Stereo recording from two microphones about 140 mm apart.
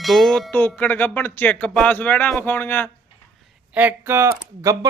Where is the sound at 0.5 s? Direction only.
10° left (ahead or behind).